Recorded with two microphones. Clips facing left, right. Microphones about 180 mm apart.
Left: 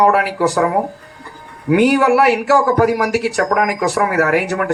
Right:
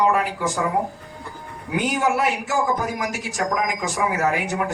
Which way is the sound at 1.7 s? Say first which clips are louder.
Left 10 dB; 70° left (ahead or behind).